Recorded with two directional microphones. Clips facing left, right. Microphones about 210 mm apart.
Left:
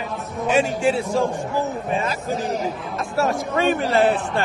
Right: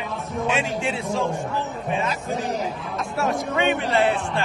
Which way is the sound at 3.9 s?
50° left (ahead or behind).